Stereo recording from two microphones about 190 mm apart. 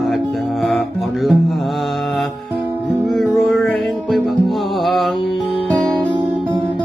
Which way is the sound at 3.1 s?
Centre (ahead or behind).